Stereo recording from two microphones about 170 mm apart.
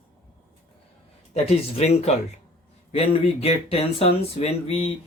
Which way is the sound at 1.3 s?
40° left (ahead or behind).